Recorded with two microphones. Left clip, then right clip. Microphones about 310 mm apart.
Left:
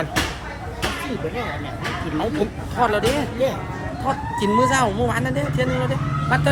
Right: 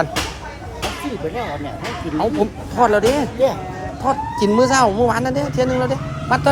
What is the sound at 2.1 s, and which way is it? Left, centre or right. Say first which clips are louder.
Speech: right 6 dB; right.